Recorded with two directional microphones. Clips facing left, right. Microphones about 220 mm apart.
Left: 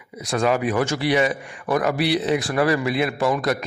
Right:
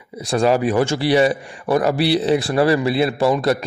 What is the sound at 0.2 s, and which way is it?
A man's voice, 30° right (ahead or behind).